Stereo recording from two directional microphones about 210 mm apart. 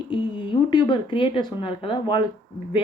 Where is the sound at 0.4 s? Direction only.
20° left (ahead or behind).